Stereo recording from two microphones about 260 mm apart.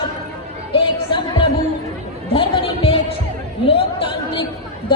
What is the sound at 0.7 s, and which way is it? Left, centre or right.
Music, centre.